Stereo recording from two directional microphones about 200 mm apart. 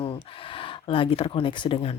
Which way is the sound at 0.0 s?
25° left (ahead or behind).